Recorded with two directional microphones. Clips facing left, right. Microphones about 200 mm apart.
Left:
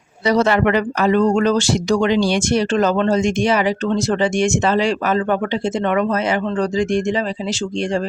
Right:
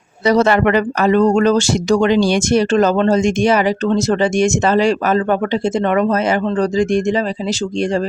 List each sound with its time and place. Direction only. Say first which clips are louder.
0.3 s speech: right 3 dB; 50° right (ahead or behind)